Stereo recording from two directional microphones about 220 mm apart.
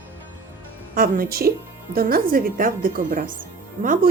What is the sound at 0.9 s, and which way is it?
A woman's voice, 40° right (ahead or behind).